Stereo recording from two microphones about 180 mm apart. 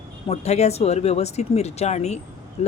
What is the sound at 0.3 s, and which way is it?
A man's voice, 40° left (ahead or behind).